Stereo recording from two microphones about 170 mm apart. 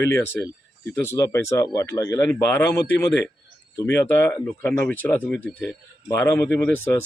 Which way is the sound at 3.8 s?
15° left (ahead or behind).